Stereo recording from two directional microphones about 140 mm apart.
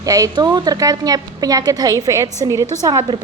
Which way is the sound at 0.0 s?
25° right (ahead or behind).